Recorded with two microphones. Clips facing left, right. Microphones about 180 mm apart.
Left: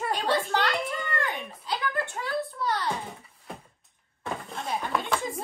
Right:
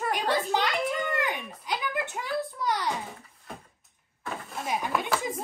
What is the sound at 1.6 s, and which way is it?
Speech, 15° right (ahead or behind).